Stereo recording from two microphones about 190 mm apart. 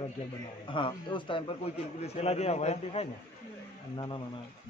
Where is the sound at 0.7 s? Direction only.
25° left (ahead or behind).